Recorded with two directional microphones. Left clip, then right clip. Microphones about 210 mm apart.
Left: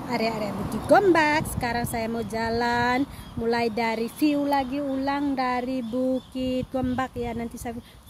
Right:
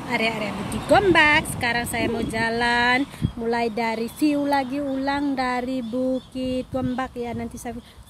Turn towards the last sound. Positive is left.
turn(degrees=5)  # may be behind; listen again after turning